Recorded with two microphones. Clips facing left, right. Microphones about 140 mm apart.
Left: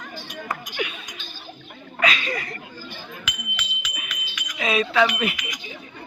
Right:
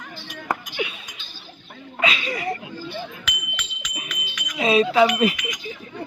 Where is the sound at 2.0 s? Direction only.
20° right (ahead or behind).